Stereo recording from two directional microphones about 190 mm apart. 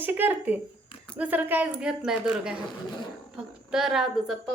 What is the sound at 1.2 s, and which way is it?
A woman's voice, 10° right (ahead or behind).